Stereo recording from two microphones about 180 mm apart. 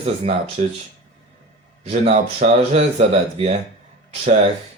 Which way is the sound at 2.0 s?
35° right (ahead or behind).